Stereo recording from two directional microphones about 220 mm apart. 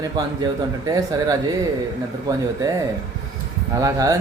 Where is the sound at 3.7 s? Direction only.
15° right (ahead or behind).